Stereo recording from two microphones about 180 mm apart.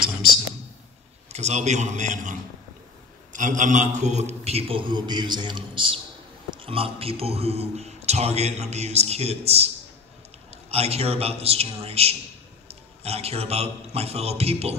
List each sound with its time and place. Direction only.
1.3 s speech: 40° right (ahead or behind)
3.3 s a man's voice: 45° right (ahead or behind)